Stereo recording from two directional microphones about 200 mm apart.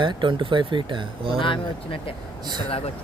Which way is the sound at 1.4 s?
25° left (ahead or behind).